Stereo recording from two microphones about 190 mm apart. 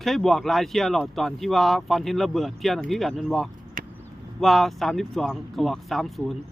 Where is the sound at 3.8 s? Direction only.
45° right (ahead or behind).